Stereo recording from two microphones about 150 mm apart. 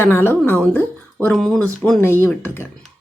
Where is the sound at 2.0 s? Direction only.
15° left (ahead or behind).